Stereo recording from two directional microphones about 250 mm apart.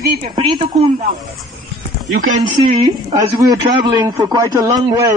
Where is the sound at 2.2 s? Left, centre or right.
Right.